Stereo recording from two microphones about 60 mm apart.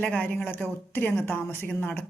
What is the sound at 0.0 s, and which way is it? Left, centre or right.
A woman's voice, left.